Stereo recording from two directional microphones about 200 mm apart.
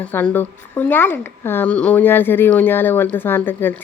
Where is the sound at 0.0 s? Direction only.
5° left (ahead or behind).